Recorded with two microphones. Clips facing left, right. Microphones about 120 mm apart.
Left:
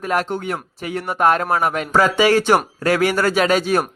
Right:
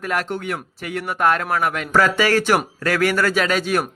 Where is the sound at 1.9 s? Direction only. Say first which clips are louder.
Left 2 dB; 20° left (ahead or behind).